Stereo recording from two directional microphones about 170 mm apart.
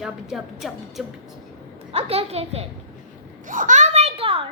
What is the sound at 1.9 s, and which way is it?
Speech, 35° right (ahead or behind).